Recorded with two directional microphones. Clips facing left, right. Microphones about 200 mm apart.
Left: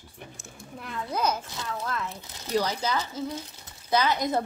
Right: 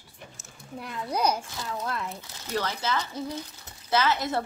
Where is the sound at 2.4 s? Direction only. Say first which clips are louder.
Left 3 dB; 15° left (ahead or behind).